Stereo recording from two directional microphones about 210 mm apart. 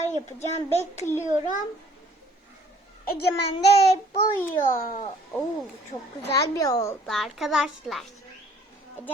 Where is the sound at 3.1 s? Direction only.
50° left (ahead or behind).